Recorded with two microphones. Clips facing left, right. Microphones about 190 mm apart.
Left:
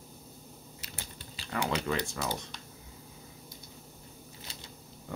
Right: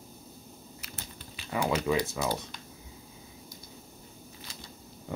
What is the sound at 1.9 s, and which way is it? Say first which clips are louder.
Speech: right 4 dB; 10° right (ahead or behind).